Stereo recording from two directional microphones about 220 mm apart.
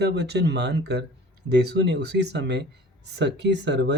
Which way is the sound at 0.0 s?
50° right (ahead or behind).